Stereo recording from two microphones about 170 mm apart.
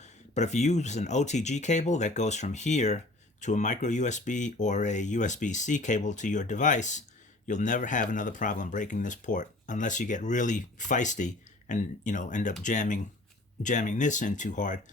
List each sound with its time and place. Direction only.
0.0 s speech: 45° left (ahead or behind)